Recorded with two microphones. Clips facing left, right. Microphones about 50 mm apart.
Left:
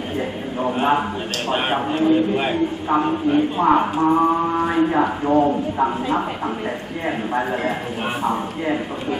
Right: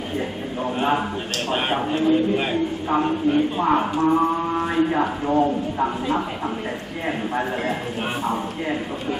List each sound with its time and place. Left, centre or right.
0.7 s speech: centre
7.1 s speech: centre